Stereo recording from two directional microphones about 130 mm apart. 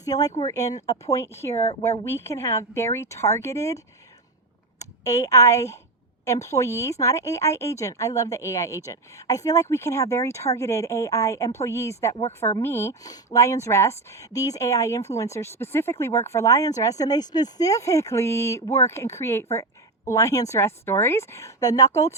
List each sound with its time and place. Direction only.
0.0 s speech: 25° left (ahead or behind)
1.5 s speech: 55° left (ahead or behind)
2.0 s speech: 20° left (ahead or behind)
4.8 s a woman's voice: 25° left (ahead or behind)